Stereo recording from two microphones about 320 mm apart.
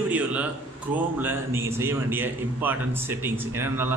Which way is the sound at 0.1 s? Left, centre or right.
Centre.